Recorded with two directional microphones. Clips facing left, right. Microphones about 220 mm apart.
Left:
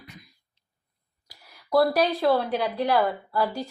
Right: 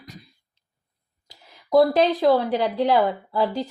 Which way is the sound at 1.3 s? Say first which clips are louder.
Right 4 dB; 20° right (ahead or behind).